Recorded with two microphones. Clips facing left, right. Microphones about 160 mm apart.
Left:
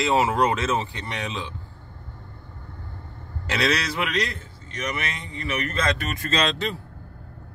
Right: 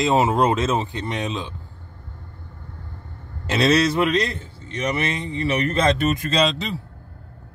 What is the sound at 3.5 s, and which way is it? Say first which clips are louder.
A man's voice: right 7 dB; 25° right (ahead or behind).